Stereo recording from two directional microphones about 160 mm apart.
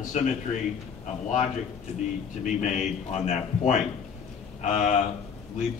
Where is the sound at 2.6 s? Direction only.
45° left (ahead or behind).